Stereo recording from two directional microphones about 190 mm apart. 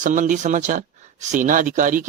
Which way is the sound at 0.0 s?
40° right (ahead or behind).